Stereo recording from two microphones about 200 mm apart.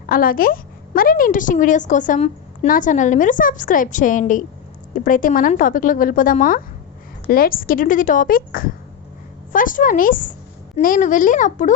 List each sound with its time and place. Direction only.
0.1 s a woman's voice: 45° left (ahead or behind)